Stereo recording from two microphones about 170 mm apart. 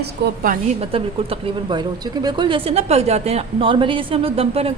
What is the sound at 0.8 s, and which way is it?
Speech, 35° right (ahead or behind).